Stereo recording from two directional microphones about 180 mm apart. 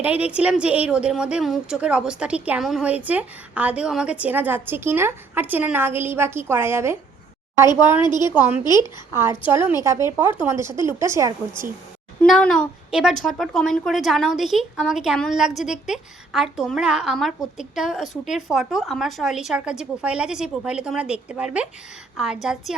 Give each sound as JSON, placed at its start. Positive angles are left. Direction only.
{"t": 0.0, "sound": "a woman's voice", "side_deg": -10}
{"t": 7.9, "sound": "a woman's voice", "side_deg": 25}
{"t": 8.8, "sound": "a woman's voice", "side_deg": -15}
{"t": 12.2, "sound": "a woman's voice", "side_deg": 5}